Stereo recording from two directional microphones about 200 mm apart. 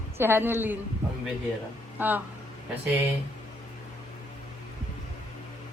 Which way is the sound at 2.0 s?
10° right (ahead or behind).